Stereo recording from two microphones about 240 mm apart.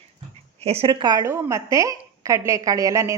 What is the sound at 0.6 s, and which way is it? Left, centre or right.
A woman's voice, right.